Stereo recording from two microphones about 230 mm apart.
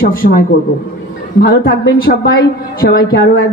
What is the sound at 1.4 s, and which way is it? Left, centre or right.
A man's voice, left.